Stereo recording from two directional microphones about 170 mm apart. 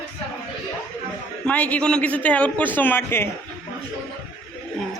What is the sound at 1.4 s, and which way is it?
A man's voice, 10° left (ahead or behind).